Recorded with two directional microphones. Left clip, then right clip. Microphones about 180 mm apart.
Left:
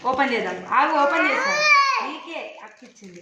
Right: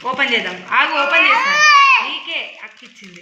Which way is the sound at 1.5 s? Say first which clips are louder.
Right 5 dB; 10° right (ahead or behind).